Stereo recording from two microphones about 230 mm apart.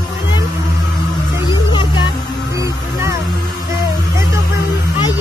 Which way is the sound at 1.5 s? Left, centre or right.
Centre.